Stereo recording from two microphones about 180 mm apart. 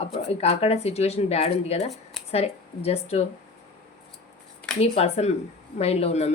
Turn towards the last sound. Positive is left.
turn(degrees=35)  # may be behind; listen again after turning